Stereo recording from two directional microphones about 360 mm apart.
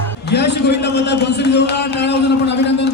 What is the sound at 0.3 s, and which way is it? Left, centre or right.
A man's voice, left.